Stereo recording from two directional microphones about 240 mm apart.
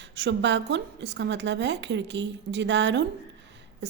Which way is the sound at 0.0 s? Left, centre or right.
Right.